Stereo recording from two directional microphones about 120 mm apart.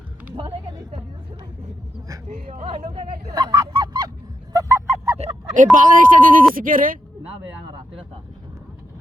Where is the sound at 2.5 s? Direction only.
65° right (ahead or behind).